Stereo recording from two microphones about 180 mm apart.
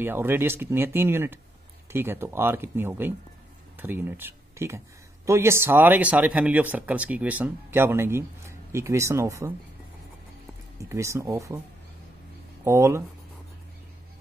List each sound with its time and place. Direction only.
0.0 s speech: 10° right (ahead or behind)
10.8 s speech: 15° right (ahead or behind)
12.6 s speech: 15° right (ahead or behind)